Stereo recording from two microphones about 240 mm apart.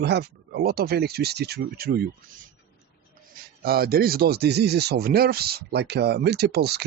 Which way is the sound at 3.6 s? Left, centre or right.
Right.